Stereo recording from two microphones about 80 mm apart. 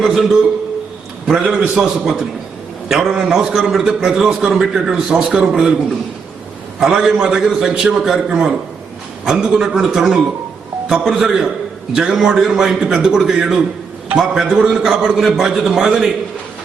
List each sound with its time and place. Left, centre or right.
0.1 s a man's voice: centre
6.7 s a man's voice: centre